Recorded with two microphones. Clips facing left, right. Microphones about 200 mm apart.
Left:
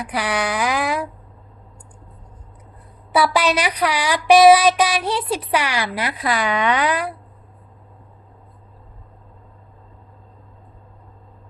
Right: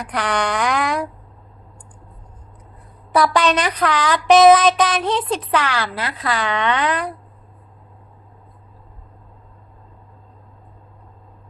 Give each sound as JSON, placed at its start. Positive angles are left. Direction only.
{"t": 0.0, "sound": "speech", "side_deg": 5}
{"t": 3.1, "sound": "child singing", "side_deg": 5}